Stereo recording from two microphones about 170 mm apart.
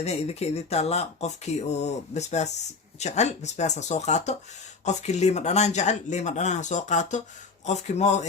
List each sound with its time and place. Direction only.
0.0 s speech: 40° left (ahead or behind)